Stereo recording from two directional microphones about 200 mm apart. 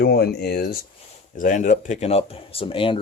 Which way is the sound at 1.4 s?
40° left (ahead or behind).